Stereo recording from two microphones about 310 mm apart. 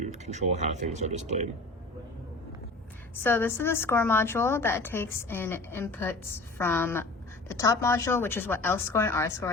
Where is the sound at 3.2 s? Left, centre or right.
Centre.